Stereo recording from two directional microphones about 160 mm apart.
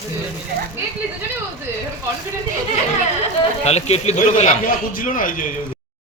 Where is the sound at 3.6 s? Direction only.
40° left (ahead or behind).